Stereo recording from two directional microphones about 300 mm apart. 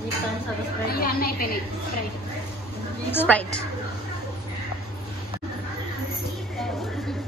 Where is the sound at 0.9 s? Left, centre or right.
Left.